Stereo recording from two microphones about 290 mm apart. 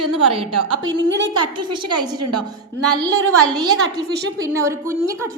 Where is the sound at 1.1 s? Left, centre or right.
Right.